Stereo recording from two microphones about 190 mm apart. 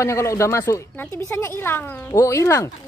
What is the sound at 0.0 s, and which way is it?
Speech, 15° left (ahead or behind).